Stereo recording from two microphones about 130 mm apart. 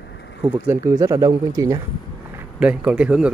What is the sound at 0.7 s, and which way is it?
Speech, 25° right (ahead or behind).